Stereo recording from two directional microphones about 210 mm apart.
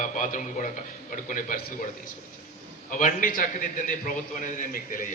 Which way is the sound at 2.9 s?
40° left (ahead or behind).